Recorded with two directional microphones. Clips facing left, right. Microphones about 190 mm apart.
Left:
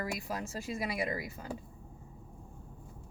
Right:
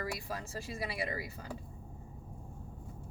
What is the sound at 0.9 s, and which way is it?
Speech, 15° left (ahead or behind).